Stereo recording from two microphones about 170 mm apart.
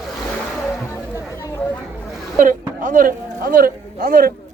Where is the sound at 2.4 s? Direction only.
50° right (ahead or behind).